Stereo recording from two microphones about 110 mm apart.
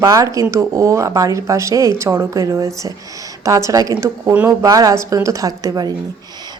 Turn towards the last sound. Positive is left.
turn(degrees=-35)  # may be behind; listen again after turning